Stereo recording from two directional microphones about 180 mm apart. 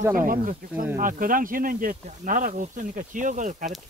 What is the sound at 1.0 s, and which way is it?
Speech, 50° right (ahead or behind).